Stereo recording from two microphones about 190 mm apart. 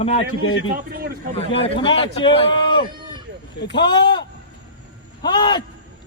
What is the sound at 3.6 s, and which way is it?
Speech, 65° left (ahead or behind).